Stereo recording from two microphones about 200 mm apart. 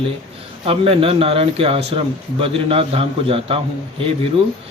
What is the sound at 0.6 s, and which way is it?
A man's voice, 30° right (ahead or behind).